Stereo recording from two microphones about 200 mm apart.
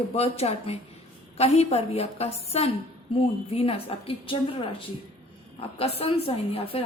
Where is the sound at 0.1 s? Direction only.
30° left (ahead or behind).